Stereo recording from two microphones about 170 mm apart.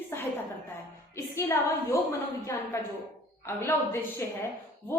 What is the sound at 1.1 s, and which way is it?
Speech, 15° left (ahead or behind).